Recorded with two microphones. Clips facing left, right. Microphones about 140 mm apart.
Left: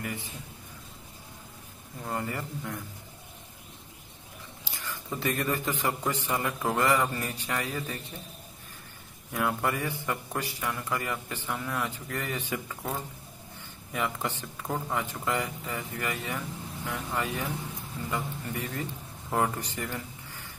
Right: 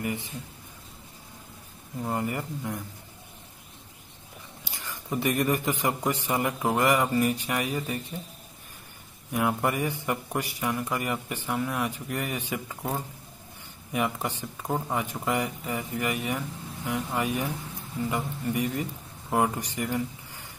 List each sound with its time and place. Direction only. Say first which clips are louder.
0.0 s a man's voice: right 5 dB; 20° right (ahead or behind)
2.0 s a man's voice: right 3 dB; 20° right (ahead or behind)
4.8 s a man's voice: right 4 dB; 15° right (ahead or behind)
9.3 s a man's voice: right 3 dB; 15° right (ahead or behind)
13.9 s a man's voice: right 3 dB; 15° right (ahead or behind)